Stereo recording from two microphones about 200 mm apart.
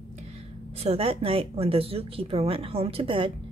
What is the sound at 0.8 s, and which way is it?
Speech, 30° right (ahead or behind).